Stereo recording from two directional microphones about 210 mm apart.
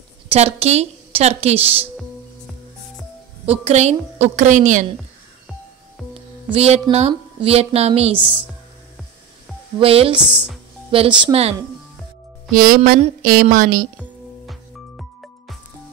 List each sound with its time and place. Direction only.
0.3 s a woman's voice: 30° right (ahead or behind)
3.4 s a woman's voice: 30° right (ahead or behind)
6.1 s speech: 30° right (ahead or behind)
9.8 s a woman's voice: 25° right (ahead or behind)
12.5 s a woman's voice: 45° right (ahead or behind)
13.9 s music: centre (ahead or behind)